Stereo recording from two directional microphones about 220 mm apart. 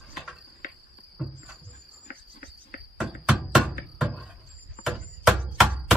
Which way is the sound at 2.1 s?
40° left (ahead or behind).